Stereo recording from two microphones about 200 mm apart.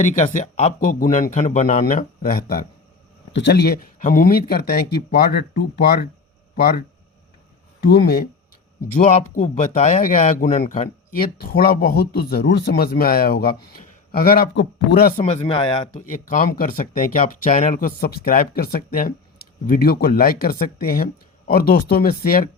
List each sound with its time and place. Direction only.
0.2 s speech: 40° left (ahead or behind)
9.0 s speech: 35° left (ahead or behind)
14.5 s speech: 65° left (ahead or behind)
15.2 s speech: 35° left (ahead or behind)
16.1 s speech: 40° left (ahead or behind)